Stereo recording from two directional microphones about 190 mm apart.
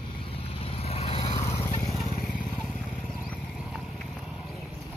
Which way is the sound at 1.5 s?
20° left (ahead or behind).